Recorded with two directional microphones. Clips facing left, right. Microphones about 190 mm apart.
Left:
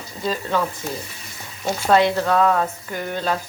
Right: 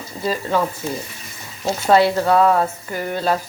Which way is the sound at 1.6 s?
10° right (ahead or behind).